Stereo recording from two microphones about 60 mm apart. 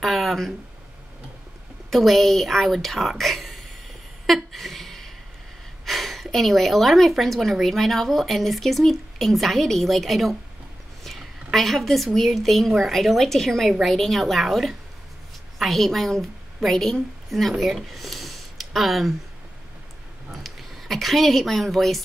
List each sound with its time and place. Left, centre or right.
0.0 s speech: centre
1.9 s speech: centre
4.3 s a sound: centre
5.9 s a woman's voice: centre
20.4 s speech: centre